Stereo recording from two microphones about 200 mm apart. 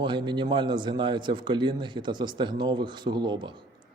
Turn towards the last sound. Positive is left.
turn(degrees=-25)  # may be behind; listen again after turning